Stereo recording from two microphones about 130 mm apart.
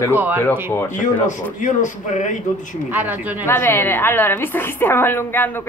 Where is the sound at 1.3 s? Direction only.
70° left (ahead or behind).